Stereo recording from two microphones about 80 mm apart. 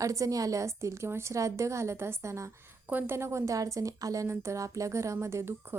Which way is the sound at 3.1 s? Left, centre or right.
Right.